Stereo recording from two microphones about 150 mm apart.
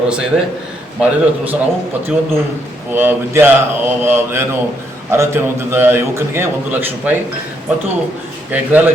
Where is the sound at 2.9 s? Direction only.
15° right (ahead or behind).